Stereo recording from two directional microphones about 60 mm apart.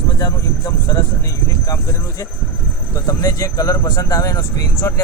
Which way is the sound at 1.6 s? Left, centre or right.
Left.